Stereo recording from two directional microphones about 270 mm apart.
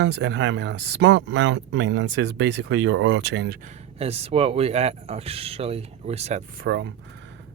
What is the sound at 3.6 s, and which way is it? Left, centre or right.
Speech, right.